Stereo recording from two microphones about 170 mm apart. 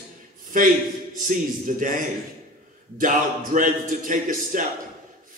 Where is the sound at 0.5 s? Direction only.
50° right (ahead or behind).